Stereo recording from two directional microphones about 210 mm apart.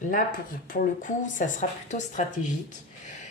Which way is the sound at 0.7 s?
40° left (ahead or behind).